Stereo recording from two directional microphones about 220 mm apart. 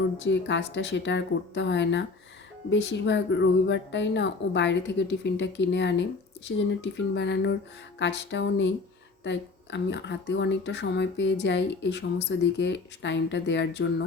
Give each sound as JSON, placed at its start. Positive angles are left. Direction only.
{"t": 0.3, "sound": "speech", "side_deg": 55}